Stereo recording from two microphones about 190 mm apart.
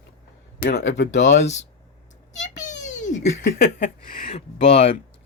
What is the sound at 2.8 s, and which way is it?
Speech, 40° left (ahead or behind).